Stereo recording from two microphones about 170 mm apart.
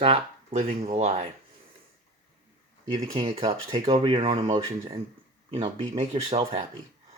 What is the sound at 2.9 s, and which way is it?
Speech, 30° right (ahead or behind).